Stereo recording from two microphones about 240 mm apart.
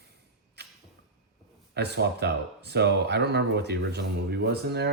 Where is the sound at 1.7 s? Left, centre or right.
Right.